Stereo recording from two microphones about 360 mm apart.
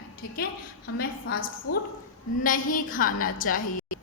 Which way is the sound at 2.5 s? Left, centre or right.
Left.